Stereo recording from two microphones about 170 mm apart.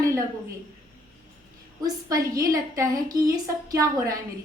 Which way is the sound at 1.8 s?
20° right (ahead or behind).